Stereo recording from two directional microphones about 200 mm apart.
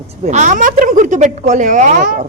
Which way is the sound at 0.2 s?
35° right (ahead or behind).